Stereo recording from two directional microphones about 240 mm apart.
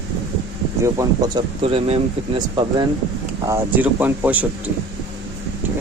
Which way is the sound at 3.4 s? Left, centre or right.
Centre.